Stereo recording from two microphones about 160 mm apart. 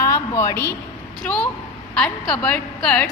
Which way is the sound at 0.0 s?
20° left (ahead or behind).